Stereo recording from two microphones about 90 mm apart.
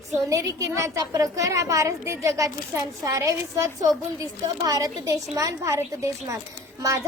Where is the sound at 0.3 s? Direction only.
35° right (ahead or behind).